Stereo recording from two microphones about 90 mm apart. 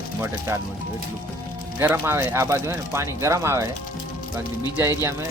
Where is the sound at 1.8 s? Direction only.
25° right (ahead or behind).